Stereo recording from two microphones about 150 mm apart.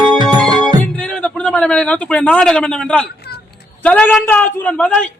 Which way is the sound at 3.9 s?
10° left (ahead or behind).